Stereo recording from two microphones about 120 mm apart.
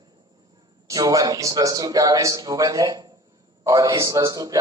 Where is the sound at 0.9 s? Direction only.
30° right (ahead or behind).